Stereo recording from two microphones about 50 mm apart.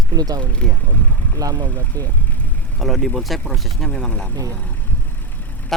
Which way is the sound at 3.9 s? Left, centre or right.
Centre.